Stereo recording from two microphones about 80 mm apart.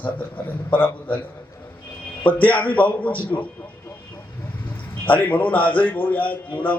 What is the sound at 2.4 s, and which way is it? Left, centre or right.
A man's voice, centre.